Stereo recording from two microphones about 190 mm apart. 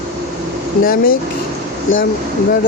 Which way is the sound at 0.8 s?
50° left (ahead or behind).